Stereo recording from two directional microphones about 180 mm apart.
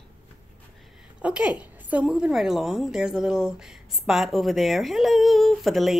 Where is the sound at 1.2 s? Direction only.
5° right (ahead or behind).